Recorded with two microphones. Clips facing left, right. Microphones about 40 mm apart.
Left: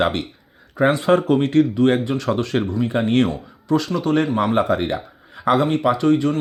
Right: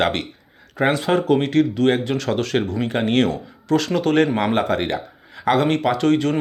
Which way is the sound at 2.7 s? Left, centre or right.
Right.